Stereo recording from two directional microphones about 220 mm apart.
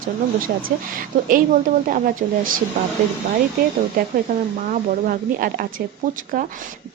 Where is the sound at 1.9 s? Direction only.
40° right (ahead or behind).